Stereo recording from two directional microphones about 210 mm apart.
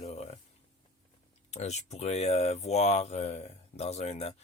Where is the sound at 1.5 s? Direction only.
30° left (ahead or behind).